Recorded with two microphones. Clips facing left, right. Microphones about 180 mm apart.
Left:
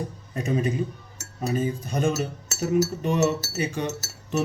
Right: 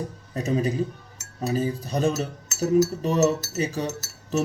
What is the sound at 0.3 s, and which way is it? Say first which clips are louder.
Speech: right 1 dB; 35° right (ahead or behind).